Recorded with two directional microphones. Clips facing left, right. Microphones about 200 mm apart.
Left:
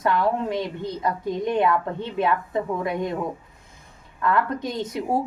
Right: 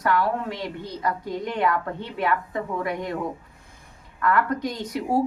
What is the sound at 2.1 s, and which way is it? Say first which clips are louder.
Speech: left 2 dB; 25° left (ahead or behind).